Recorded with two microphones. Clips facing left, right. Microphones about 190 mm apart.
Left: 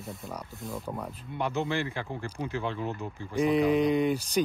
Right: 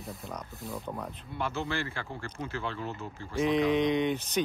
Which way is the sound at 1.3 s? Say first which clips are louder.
Left 4 dB; 15° left (ahead or behind).